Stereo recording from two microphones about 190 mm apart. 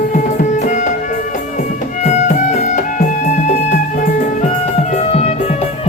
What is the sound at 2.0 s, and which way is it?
Music, 40° left (ahead or behind).